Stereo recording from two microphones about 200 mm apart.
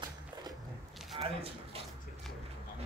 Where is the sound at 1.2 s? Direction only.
30° right (ahead or behind).